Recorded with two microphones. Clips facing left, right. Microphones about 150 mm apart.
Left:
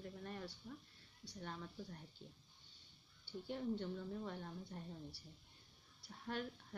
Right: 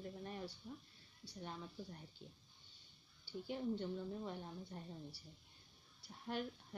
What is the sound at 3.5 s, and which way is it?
A woman's voice, 10° right (ahead or behind).